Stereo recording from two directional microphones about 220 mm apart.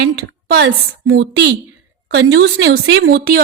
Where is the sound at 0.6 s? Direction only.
60° right (ahead or behind).